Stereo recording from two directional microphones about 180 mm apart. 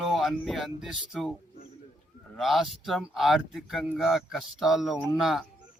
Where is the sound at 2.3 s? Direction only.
Centre (ahead or behind).